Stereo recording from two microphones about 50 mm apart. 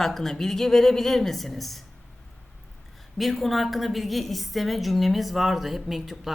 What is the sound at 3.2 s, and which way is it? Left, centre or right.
A woman's voice, centre.